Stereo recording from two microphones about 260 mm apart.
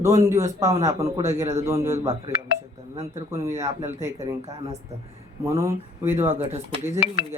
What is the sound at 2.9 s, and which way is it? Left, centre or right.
A woman's voice, right.